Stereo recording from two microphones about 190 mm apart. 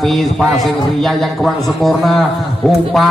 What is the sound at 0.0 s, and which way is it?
A man's voice, centre (ahead or behind).